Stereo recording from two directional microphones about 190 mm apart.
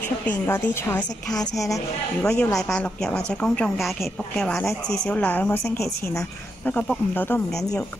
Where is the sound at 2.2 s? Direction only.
5° left (ahead or behind).